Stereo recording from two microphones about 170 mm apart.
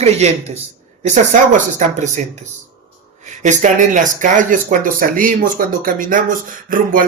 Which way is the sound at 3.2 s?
45° right (ahead or behind).